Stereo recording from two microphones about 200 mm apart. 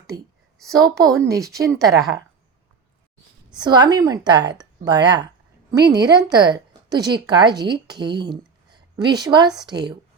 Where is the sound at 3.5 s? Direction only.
20° right (ahead or behind).